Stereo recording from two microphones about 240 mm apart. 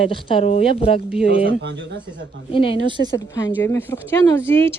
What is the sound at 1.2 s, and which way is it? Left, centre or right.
Speech, right.